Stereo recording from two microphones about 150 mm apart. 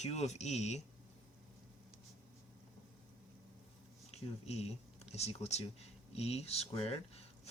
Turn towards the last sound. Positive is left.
turn(degrees=40)  # may be behind; listen again after turning